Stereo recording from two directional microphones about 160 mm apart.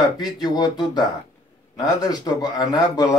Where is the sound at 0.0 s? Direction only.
25° left (ahead or behind).